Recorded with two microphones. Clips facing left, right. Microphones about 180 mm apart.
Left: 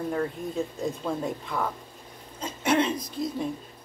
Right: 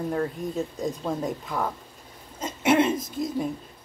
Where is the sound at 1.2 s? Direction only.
5° right (ahead or behind).